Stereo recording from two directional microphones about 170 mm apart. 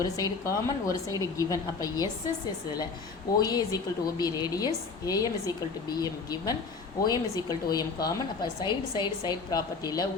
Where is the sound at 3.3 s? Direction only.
20° left (ahead or behind).